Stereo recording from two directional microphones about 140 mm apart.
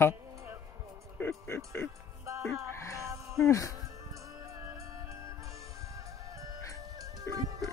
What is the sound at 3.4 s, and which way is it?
Speech, 20° left (ahead or behind).